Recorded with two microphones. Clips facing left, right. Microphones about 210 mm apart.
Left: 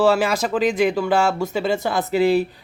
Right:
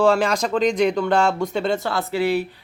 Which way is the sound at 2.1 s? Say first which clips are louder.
Left 4 dB; 25° left (ahead or behind).